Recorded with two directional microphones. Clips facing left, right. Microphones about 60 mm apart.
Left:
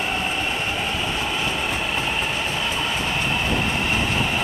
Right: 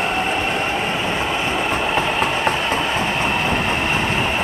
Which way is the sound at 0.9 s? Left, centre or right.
Right.